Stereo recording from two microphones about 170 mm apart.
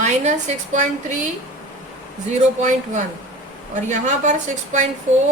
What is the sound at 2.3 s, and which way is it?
A woman's voice, 45° right (ahead or behind).